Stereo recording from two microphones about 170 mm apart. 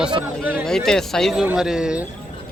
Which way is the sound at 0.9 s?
5° left (ahead or behind).